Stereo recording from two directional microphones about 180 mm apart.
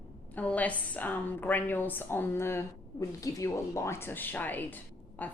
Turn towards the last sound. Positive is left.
turn(degrees=10)  # may be behind; listen again after turning